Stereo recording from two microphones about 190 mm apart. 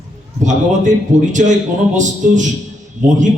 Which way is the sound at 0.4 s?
40° right (ahead or behind).